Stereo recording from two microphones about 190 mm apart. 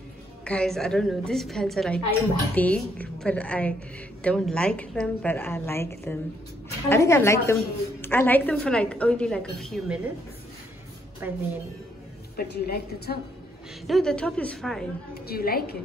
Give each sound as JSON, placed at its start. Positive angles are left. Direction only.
{"t": 0.5, "sound": "a woman's voice", "side_deg": 5}
{"t": 11.2, "sound": "speech", "side_deg": -10}
{"t": 12.4, "sound": "a woman's voice", "side_deg": 55}
{"t": 13.8, "sound": "a woman's voice", "side_deg": 0}
{"t": 15.2, "sound": "a woman's voice", "side_deg": 50}